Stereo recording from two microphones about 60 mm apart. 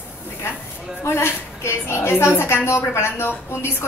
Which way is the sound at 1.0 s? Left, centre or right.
Left.